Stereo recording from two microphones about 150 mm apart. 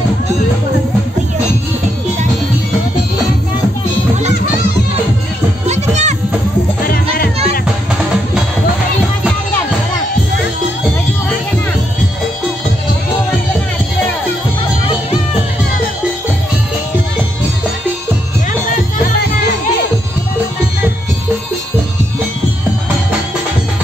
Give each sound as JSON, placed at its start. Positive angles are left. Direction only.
{"t": 5.7, "sound": "music", "side_deg": -50}